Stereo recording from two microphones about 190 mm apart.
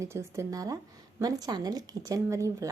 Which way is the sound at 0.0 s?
15° right (ahead or behind).